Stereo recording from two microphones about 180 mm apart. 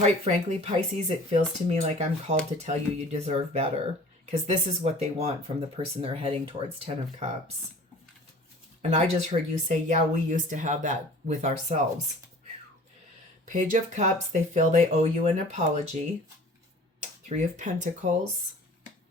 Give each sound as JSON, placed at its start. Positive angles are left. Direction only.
{"t": 0.0, "sound": "speech", "side_deg": -35}
{"t": 9.0, "sound": "speech", "side_deg": -40}
{"t": 13.4, "sound": "speech", "side_deg": -45}
{"t": 17.2, "sound": "speech", "side_deg": -40}